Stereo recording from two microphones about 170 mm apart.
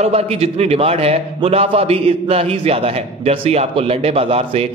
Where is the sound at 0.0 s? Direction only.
35° right (ahead or behind).